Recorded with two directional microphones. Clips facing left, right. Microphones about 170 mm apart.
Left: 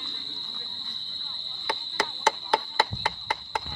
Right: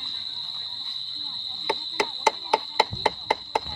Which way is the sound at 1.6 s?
20° right (ahead or behind).